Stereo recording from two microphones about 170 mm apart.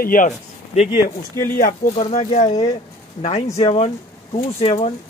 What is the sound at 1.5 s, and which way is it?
Speech, 55° left (ahead or behind).